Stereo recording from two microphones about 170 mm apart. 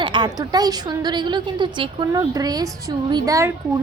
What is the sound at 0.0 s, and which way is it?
A woman's voice, 25° right (ahead or behind).